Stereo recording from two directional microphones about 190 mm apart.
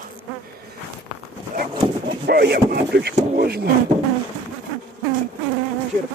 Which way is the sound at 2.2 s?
60° right (ahead or behind).